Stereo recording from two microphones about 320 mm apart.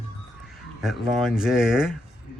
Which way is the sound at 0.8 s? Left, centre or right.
Centre.